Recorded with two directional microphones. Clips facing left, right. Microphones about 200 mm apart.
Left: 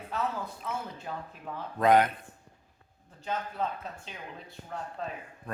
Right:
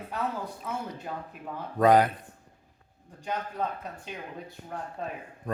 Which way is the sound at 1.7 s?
35° right (ahead or behind).